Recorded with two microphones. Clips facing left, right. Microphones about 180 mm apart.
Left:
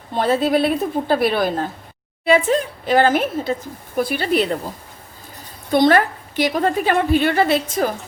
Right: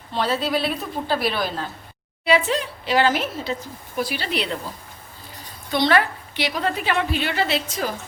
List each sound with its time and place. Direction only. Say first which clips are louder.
0.1 s speech: left 6 dB; 50° left (ahead or behind)
5.7 s speech: left 5 dB; 45° left (ahead or behind)